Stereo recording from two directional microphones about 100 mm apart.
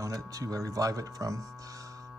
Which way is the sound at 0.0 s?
35° right (ahead or behind).